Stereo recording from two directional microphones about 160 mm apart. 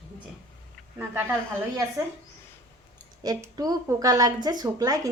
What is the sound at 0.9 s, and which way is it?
Speech, 15° right (ahead or behind).